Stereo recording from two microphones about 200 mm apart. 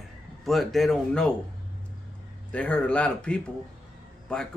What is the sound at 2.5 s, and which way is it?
Speech, 5° left (ahead or behind).